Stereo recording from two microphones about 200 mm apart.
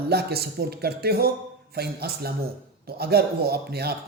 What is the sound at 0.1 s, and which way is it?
Speech, 50° right (ahead or behind).